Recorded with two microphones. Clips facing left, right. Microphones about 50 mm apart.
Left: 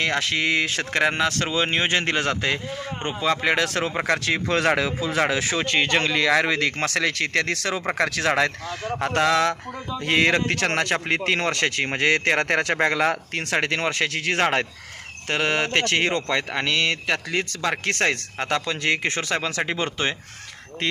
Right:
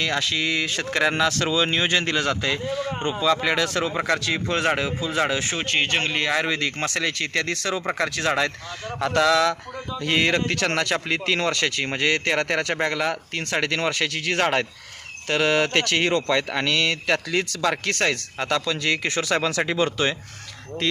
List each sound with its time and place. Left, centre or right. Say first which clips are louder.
0.0 s speech: left 1 dB; left
0.9 s speech: right 3 dB; left
3.0 s speech: right 3 dB; left
3.2 s speech: left 1 dB; left
9.0 s speech: right 1 dB; left
10.0 s speech: left 1 dB; left
13.6 s speech: even; left
14.4 s speech: even; left
16.3 s speech: right 1 dB; centre; by 19.2 s left
19.4 s speech: right 3 dB; centre